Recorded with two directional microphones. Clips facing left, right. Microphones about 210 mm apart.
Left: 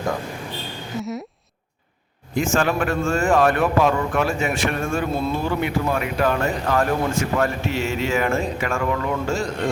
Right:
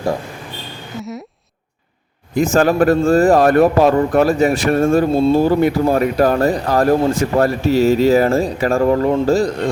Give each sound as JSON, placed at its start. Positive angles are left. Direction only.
{"t": 0.9, "sound": "speech", "side_deg": 0}
{"t": 2.3, "sound": "a man's voice", "side_deg": -40}